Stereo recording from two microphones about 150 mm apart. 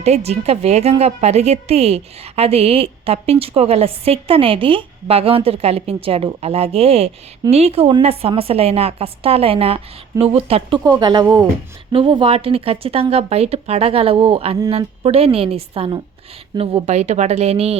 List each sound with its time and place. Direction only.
0.0 s a woman's voice: 45° right (ahead or behind)
10.8 s a woman's voice: 25° right (ahead or behind); by 17.7 s 40° right (ahead or behind)